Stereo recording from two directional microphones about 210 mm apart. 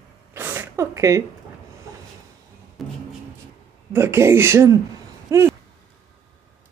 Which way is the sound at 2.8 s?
Centre (ahead or behind).